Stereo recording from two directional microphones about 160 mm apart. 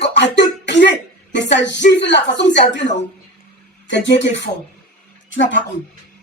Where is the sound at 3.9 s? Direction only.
90° left.